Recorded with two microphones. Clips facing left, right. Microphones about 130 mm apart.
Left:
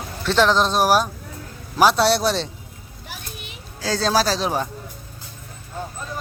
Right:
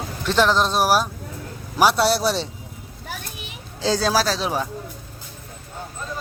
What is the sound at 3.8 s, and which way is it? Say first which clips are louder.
Speech: right 2 dB; 15° right (ahead or behind).